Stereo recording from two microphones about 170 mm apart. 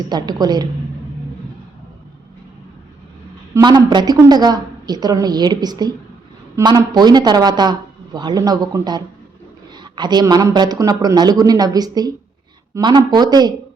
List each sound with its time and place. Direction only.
0.1 s speech: 25° right (ahead or behind)
3.5 s speech: 25° right (ahead or behind)